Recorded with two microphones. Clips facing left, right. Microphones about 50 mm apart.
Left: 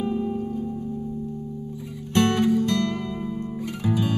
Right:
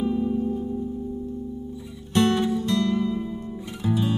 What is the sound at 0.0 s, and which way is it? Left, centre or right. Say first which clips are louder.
Music: right 2 dB; left.